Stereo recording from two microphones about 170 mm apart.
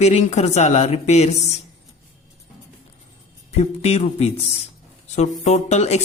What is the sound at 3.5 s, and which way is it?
Speech, 40° left (ahead or behind).